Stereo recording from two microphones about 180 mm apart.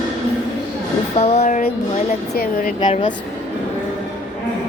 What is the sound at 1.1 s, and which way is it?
Speech, 35° left (ahead or behind).